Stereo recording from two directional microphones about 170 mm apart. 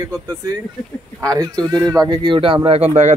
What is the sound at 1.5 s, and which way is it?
Speech, 5° left (ahead or behind).